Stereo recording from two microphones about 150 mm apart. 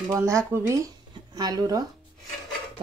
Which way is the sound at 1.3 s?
25° right (ahead or behind).